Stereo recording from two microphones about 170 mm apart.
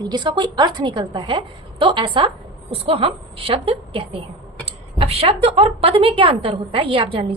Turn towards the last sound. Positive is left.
turn(degrees=-35)  # may be behind; listen again after turning